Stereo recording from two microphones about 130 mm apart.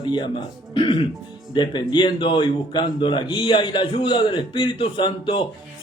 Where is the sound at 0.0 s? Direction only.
35° left (ahead or behind).